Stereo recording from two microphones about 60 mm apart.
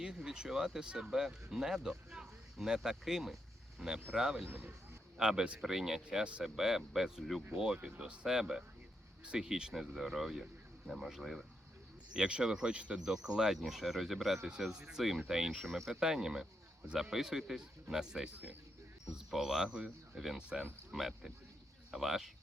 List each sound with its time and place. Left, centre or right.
0.0 s speech: centre
4.4 s speech: right
5.1 s speech: centre
6.1 s speech: centre
6.4 s speech: centre
13.0 s speech: centre
14.7 s speech: centre
15.6 s speech: centre
15.9 s speech: centre